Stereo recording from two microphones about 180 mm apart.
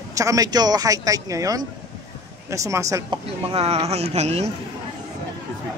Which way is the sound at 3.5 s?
35° right (ahead or behind).